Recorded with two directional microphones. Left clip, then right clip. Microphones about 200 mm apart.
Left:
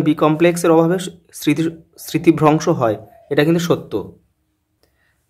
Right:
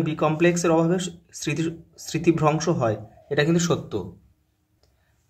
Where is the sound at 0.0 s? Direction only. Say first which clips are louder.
Left 7 dB; 30° left (ahead or behind).